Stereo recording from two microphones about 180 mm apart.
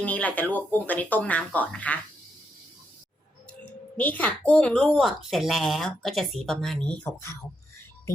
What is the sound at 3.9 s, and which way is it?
A woman's voice, 10° left (ahead or behind).